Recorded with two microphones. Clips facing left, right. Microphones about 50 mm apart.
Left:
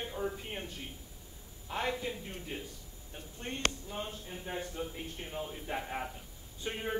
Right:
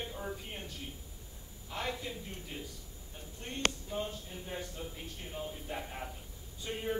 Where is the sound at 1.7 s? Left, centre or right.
Left.